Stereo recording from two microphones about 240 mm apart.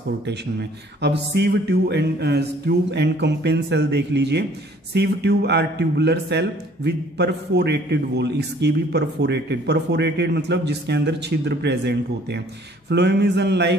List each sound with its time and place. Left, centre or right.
0.3 s a man's voice: right